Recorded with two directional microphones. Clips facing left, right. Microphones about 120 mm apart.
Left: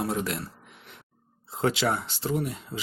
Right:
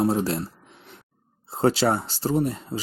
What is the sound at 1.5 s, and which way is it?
Speech, 35° right (ahead or behind).